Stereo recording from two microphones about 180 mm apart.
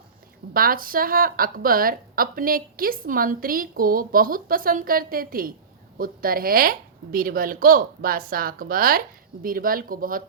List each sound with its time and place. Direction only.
0.5 s a woman's voice: 55° right (ahead or behind)